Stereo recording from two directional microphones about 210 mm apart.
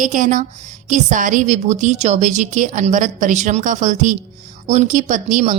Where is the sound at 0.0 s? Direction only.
35° right (ahead or behind).